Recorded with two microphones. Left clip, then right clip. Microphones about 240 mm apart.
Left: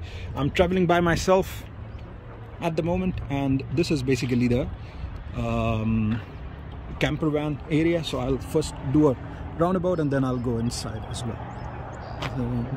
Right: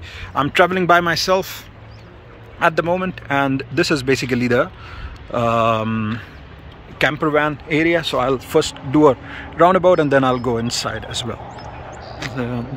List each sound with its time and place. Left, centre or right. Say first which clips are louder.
0.2 s a man's voice: right 9 dB; centre
2.6 s speech: right 10 dB; centre
9.6 s a man's voice: right 12 dB; right
12.2 s a sound: right 4 dB; centre